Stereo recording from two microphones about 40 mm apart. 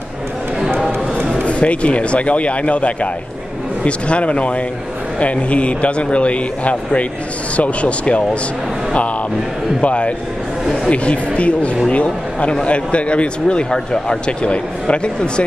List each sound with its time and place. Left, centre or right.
1.4 s a man's voice: left
9.8 s a man's voice: left